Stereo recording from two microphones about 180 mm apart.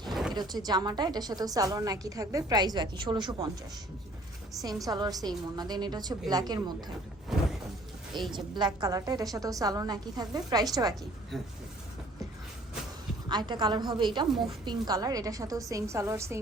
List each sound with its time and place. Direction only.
0.0 s a sound: centre (ahead or behind)
0.3 s a woman's voice: 25° right (ahead or behind)
4.6 s a woman's voice: 20° right (ahead or behind)
7.3 s a sound: centre (ahead or behind)
8.1 s a woman's voice: centre (ahead or behind)
8.5 s a woman's voice: 20° right (ahead or behind)
13.2 s a woman's voice: 25° right (ahead or behind)